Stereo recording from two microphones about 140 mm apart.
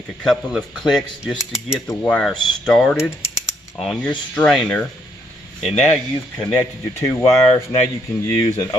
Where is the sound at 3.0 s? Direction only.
20° left (ahead or behind).